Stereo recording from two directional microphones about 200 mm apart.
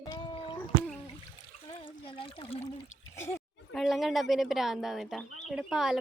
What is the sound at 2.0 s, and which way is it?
Trickle, 25° left (ahead or behind).